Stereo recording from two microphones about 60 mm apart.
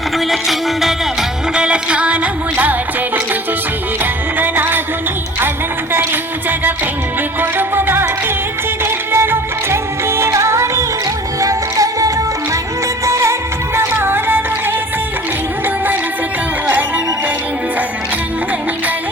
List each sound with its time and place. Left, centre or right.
0.3 s music: centre
1.5 s music: centre
4.4 s music: right
7.8 s music: right
11.3 s music: right
13.1 s music of bollywood: right
14.0 s music: right